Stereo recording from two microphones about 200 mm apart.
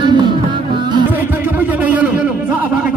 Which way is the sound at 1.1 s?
10° right (ahead or behind).